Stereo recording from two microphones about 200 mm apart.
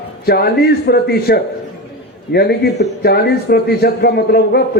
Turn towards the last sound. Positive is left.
turn(degrees=55)  # may be behind; listen again after turning